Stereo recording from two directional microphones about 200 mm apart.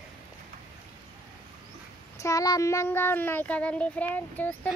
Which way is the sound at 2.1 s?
15° left (ahead or behind).